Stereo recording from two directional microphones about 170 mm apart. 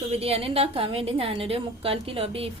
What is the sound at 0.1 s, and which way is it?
A woman's voice, 35° right (ahead or behind).